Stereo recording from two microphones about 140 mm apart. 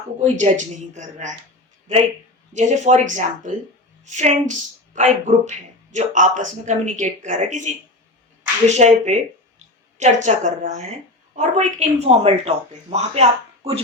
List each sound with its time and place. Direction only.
0.2 s a woman's voice: 60° right (ahead or behind)
2.5 s a woman's voice: 60° right (ahead or behind)